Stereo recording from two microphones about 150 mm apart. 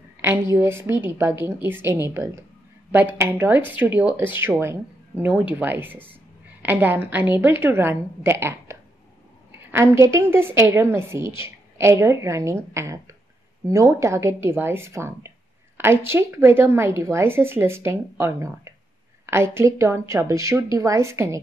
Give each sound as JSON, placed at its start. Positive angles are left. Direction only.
{"t": 0.2, "sound": "a woman's voice", "side_deg": -20}